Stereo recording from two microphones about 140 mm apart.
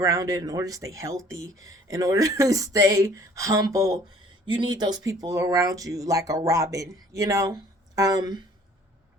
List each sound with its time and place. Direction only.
0.0 s speech: 25° right (ahead or behind)